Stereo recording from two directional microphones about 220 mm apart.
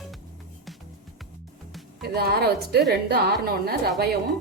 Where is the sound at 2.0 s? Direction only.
45° right (ahead or behind).